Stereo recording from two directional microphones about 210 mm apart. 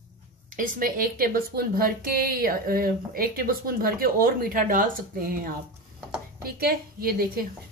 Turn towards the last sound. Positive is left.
turn(degrees=-45)  # may be behind; listen again after turning